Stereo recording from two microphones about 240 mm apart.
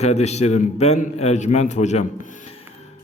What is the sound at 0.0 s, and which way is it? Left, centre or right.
A man's voice, left.